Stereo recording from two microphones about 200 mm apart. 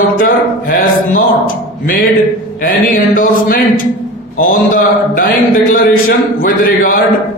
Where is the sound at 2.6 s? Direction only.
45° left (ahead or behind).